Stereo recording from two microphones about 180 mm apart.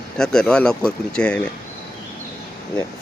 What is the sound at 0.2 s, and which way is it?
Speech, 5° left (ahead or behind).